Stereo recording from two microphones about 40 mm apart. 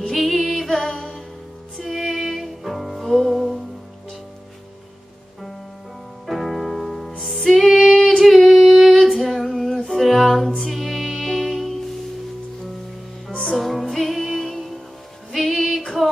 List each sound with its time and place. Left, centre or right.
0.1 s music: centre
6.2 s music: centre
8.5 s female singing: centre
9.8 s music: centre
13.3 s music: left
13.6 s music: centre